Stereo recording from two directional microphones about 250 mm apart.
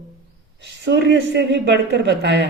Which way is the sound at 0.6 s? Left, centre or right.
Right.